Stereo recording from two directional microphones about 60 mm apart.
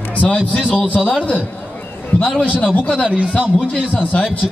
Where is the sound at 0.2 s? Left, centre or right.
Centre.